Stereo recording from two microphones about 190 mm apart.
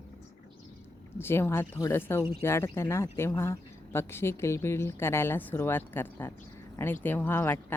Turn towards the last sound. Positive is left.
turn(degrees=10)  # may be behind; listen again after turning